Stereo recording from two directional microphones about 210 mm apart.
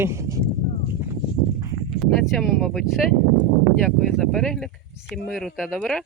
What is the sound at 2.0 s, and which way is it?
Speech, centre (ahead or behind).